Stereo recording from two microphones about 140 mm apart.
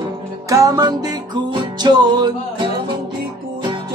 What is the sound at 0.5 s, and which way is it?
Music, 25° right (ahead or behind).